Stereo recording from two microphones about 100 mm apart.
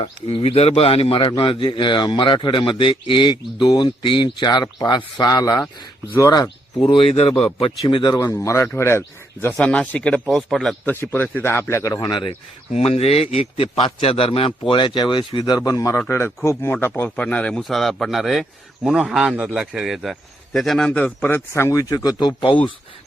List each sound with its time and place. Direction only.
0.0 s a man's voice: 65° left (ahead or behind)
1.4 s speech: 55° left (ahead or behind); by 6.8 s 40° left (ahead or behind)
6.8 s speech: 65° left (ahead or behind)
7.9 s speech: 50° left (ahead or behind)
8.1 s speech: 30° left (ahead or behind)
9.6 s speech: 10° left (ahead or behind)
10.3 s a man's voice: centre (ahead or behind)
10.8 s speech: 20° left (ahead or behind)
11.8 s speech: 40° left (ahead or behind)
12.7 s a man's voice: 90° left; by 14.5 s 70° left (ahead or behind)
14.7 s speech: 55° left (ahead or behind); by 16.0 s 35° left (ahead or behind)
16.0 s a man's voice: 25° left (ahead or behind); by 22.5 s 50° left (ahead or behind)